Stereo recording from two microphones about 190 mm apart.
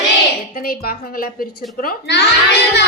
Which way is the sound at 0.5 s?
50° left (ahead or behind).